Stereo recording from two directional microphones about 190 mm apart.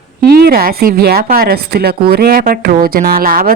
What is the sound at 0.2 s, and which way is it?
A woman's voice, 55° right (ahead or behind).